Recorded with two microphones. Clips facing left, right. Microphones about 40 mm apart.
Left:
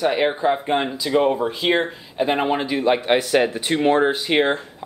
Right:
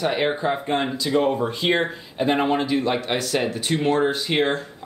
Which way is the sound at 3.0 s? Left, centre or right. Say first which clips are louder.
Left 6 dB; left.